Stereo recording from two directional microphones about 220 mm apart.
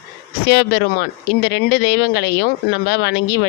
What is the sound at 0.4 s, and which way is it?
Speech, 50° left (ahead or behind).